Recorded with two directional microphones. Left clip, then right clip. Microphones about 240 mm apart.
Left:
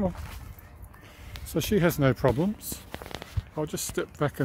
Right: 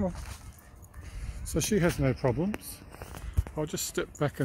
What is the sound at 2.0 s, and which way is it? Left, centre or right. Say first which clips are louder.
Speech: left 5 dB; centre.